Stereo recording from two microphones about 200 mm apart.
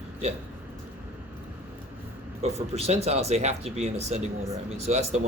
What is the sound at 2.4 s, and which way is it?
Speech, 30° right (ahead or behind).